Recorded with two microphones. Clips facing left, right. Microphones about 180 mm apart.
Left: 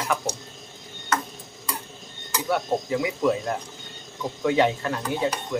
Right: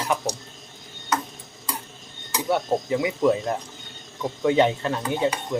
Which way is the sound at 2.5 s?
25° right (ahead or behind).